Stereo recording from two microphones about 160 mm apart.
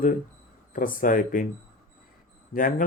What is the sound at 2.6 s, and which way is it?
Speech, 60° left (ahead or behind).